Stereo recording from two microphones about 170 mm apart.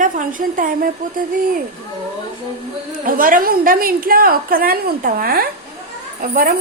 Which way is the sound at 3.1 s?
55° right (ahead or behind).